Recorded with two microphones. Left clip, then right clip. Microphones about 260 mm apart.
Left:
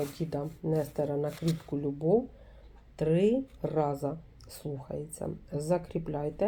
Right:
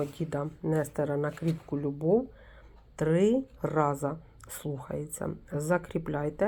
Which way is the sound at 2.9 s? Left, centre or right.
Right.